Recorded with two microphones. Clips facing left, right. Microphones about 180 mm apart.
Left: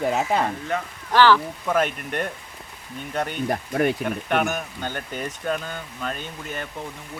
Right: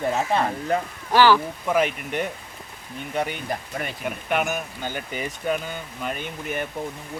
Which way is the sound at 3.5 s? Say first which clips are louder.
Left 8 dB; 50° left (ahead or behind).